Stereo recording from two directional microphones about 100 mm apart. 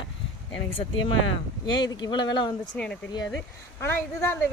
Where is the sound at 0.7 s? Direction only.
65° left (ahead or behind).